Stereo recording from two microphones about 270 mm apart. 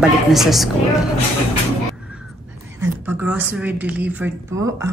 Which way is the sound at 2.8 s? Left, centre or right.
Centre.